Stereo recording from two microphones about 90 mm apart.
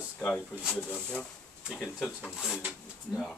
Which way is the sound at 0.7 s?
10° left (ahead or behind).